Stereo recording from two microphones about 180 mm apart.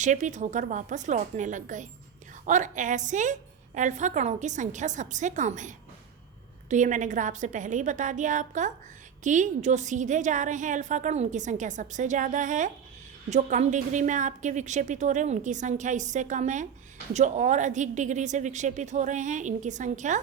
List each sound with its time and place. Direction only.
0.0 s a woman's voice: 40° right (ahead or behind)